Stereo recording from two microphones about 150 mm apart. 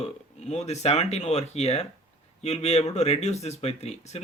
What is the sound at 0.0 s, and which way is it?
Speech, 45° left (ahead or behind).